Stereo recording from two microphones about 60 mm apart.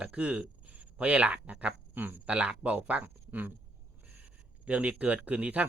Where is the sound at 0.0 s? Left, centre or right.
Centre.